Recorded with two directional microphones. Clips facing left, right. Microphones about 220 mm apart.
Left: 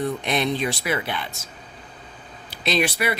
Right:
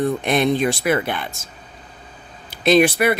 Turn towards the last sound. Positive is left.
turn(degrees=-50)  # may be behind; listen again after turning